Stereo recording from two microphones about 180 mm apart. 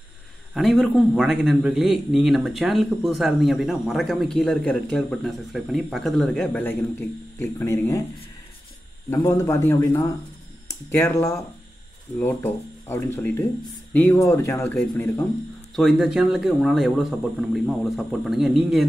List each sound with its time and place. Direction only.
0.6 s a man's voice: centre (ahead or behind)
9.1 s speech: 15° left (ahead or behind)
15.7 s a man's voice: centre (ahead or behind)